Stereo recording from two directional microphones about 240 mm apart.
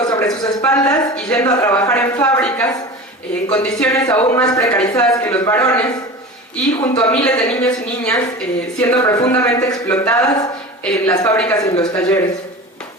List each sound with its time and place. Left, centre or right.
0.0 s a sound: centre
0.3 s speech: centre
3.8 s a man's voice: centre
7.1 s a man's voice: centre